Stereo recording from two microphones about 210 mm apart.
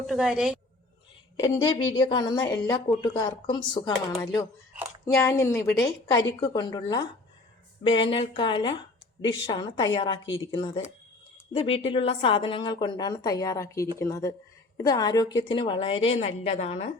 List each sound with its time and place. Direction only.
0.1 s speech: centre (ahead or behind)
1.4 s a woman's voice: 20° left (ahead or behind)